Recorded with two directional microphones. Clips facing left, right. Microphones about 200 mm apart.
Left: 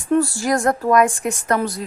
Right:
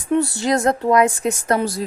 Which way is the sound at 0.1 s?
20° right (ahead or behind).